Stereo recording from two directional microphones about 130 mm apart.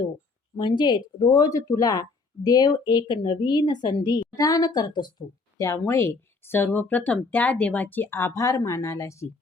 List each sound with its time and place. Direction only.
0.5 s a woman's voice: 35° left (ahead or behind)